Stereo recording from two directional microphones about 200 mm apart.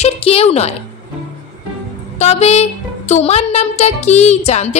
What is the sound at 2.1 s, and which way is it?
Speech, 35° left (ahead or behind).